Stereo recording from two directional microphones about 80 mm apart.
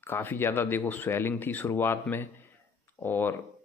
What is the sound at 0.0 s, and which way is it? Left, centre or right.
Speech, left.